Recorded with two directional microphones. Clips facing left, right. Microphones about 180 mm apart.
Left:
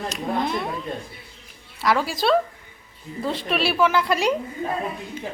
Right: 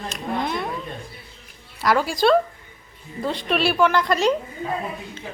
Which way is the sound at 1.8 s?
Centre (ahead or behind).